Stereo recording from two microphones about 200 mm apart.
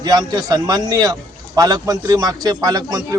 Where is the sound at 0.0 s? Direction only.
20° right (ahead or behind).